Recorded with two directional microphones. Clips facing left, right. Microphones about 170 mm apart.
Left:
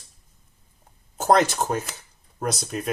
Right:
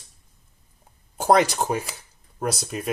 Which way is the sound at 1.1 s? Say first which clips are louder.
Right 1 dB; 10° right (ahead or behind).